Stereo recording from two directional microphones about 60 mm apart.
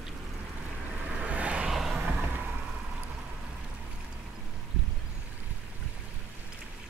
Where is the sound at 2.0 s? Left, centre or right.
Right.